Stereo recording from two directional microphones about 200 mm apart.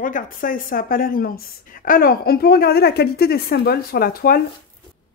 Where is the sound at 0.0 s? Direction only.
45° left (ahead or behind).